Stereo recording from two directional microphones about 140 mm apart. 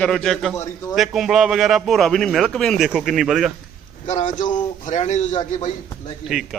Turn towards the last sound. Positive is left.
turn(degrees=0)  # may be behind; listen again after turning